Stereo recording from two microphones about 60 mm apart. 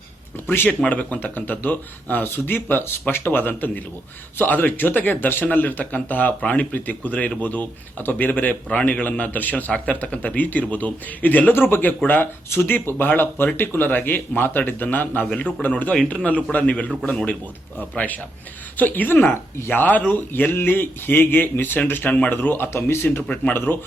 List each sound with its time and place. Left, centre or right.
0.4 s speech: left
0.9 s speech: left
17.9 s speech: left
19.3 s speech: left
19.8 s speech: left